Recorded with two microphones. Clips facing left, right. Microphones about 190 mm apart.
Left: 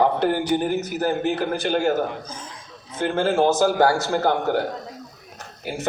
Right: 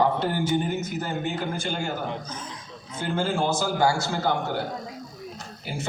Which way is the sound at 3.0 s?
60° left (ahead or behind).